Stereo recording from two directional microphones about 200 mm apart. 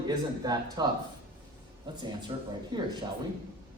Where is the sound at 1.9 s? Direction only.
20° right (ahead or behind).